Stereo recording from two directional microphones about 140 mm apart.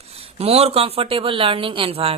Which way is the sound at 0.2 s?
45° right (ahead or behind).